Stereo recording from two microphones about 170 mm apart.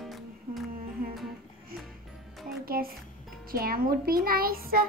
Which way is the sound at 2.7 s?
60° right (ahead or behind).